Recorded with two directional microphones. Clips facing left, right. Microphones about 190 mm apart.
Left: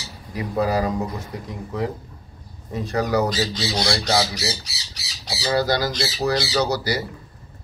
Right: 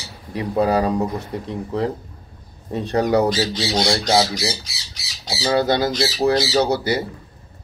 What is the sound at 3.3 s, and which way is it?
Speech, 15° right (ahead or behind).